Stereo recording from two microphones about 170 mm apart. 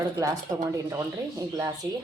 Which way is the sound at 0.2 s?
20° right (ahead or behind).